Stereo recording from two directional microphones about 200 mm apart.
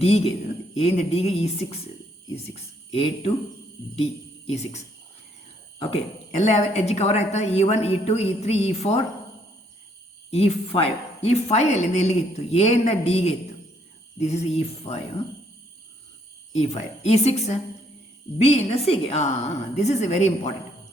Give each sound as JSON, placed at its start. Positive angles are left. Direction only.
{"t": 0.8, "sound": "a woman's voice", "side_deg": 30}
{"t": 5.9, "sound": "a woman's voice", "side_deg": 35}
{"t": 10.3, "sound": "a woman's voice", "side_deg": 30}
{"t": 16.7, "sound": "a woman's voice", "side_deg": 35}